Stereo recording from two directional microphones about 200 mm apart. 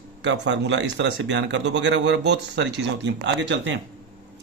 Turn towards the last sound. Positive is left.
turn(degrees=-60)  # may be behind; listen again after turning